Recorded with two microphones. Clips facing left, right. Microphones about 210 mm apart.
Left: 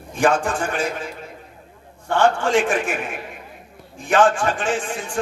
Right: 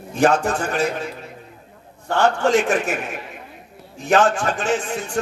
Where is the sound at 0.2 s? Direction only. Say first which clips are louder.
Right 2 dB; 40° right (ahead or behind).